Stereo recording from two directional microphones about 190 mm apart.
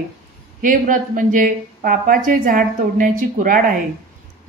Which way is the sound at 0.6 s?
45° right (ahead or behind).